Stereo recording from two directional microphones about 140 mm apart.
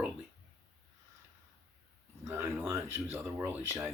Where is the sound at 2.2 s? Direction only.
20° right (ahead or behind).